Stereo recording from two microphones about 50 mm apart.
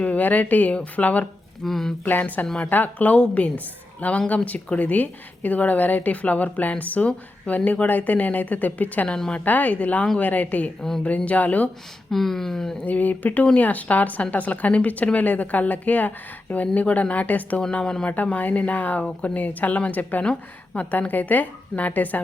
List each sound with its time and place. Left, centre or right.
0.0 s a woman's voice: left
1.6 s speech: centre
2.0 s a woman's voice: left
9.0 s speech: centre
9.3 s a woman's voice: left
12.1 s speech: centre
12.8 s a woman's voice: left
20.2 s a woman's voice: left
21.1 s a woman's voice: left